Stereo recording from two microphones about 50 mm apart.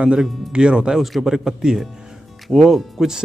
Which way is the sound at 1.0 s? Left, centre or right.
Centre.